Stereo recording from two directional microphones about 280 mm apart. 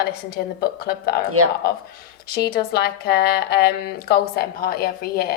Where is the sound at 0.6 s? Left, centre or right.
Left.